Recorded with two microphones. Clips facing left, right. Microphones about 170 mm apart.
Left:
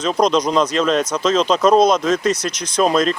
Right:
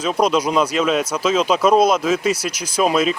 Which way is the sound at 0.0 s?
10° right (ahead or behind).